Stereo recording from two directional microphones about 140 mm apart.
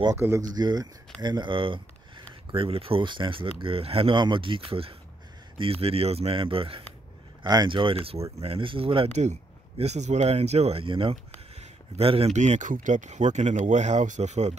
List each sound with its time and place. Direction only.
0.2 s speech: 20° right (ahead or behind)
0.6 s speech: 30° right (ahead or behind); by 14.6 s 55° right (ahead or behind)